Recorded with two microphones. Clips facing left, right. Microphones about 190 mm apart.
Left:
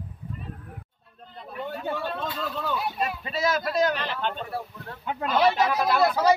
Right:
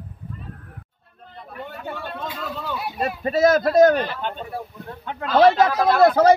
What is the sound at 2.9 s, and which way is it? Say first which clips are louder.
Speech: right 7 dB; 45° right (ahead or behind).